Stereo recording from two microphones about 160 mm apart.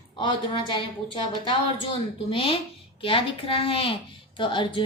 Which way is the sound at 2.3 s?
35° left (ahead or behind).